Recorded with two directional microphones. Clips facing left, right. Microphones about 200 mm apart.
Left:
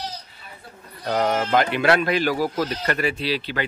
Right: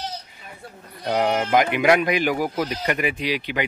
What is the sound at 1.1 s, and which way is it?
Speech, 15° right (ahead or behind).